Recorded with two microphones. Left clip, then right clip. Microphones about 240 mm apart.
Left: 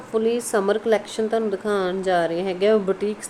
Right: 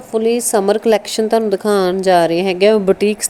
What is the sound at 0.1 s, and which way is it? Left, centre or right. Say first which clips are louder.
A woman's voice: right 6 dB; right.